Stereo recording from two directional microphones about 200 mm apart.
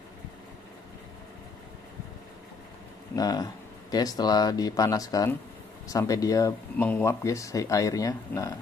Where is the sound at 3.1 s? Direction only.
20° left (ahead or behind).